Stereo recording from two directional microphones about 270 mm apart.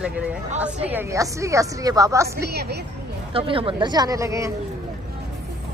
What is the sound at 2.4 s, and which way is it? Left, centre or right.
Speech, right.